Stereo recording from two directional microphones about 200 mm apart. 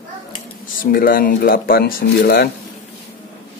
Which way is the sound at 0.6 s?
45° left (ahead or behind).